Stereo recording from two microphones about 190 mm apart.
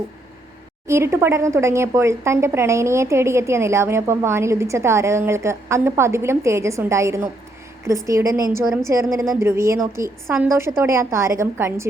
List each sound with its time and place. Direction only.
0.9 s a woman's voice: 15° right (ahead or behind)